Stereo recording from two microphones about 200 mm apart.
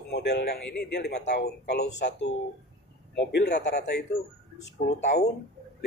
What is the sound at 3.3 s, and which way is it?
Speech, 55° left (ahead or behind).